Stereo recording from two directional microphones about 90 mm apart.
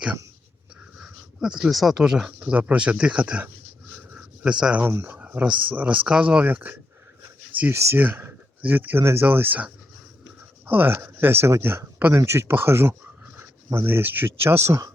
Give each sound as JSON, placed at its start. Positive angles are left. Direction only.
{"t": 1.0, "sound": "speech", "side_deg": -5}
{"t": 4.6, "sound": "speech", "side_deg": -15}
{"t": 4.9, "sound": "speech", "side_deg": -25}
{"t": 10.7, "sound": "speech", "side_deg": -20}